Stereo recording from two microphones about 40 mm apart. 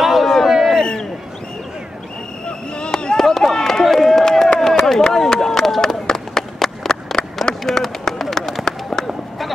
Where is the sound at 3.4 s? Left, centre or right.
Centre.